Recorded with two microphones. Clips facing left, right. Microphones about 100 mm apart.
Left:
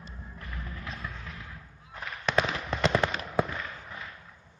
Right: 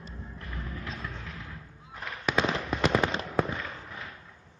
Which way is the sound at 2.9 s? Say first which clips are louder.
Right 1 dB; 20° right (ahead or behind).